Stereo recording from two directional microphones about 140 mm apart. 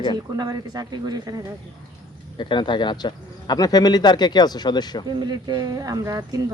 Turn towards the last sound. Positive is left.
turn(degrees=-25)  # may be behind; listen again after turning